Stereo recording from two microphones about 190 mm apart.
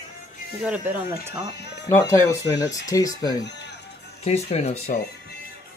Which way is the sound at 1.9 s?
15° left (ahead or behind).